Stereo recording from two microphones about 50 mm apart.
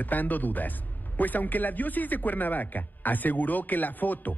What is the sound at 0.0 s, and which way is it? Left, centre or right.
A man's voice, left.